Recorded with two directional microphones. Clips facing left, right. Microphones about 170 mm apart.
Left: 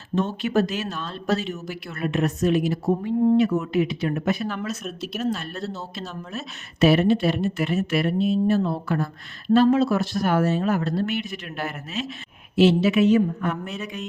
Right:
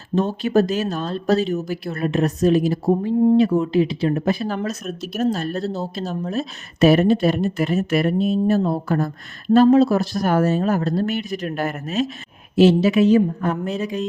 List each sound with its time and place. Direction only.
0.2 s speech: 35° right (ahead or behind)